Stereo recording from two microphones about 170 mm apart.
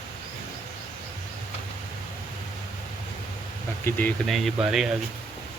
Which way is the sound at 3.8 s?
10° left (ahead or behind).